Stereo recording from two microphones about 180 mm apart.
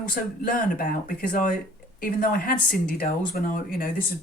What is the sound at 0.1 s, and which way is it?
Speech, 50° left (ahead or behind).